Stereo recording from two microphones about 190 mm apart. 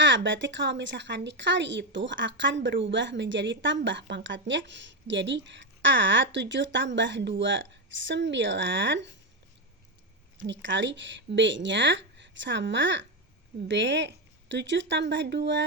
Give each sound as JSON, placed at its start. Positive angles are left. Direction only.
{"t": 0.0, "sound": "a woman's voice", "side_deg": -75}
{"t": 10.4, "sound": "a woman's voice", "side_deg": -75}